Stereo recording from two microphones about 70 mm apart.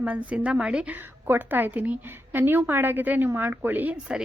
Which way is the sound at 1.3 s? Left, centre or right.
Right.